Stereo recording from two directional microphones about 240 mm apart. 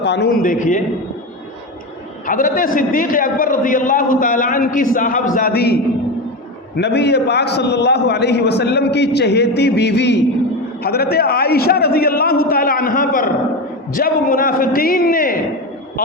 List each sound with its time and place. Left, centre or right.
0.0 s a man's voice: left
2.2 s a man's voice: left
6.7 s a man's voice: left